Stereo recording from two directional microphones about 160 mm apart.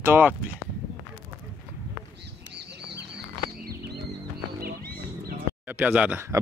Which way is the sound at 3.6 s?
75° right (ahead or behind).